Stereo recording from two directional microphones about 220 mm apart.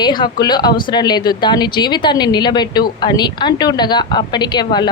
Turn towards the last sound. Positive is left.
turn(degrees=20)  # may be behind; listen again after turning